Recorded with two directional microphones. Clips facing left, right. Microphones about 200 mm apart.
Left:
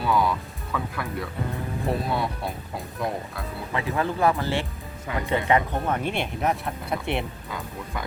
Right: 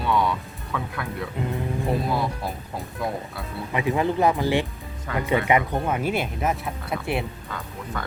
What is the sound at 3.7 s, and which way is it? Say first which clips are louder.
Speech: right 4 dB; 20° right (ahead or behind).